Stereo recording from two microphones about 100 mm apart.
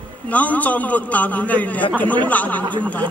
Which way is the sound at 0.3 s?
15° left (ahead or behind).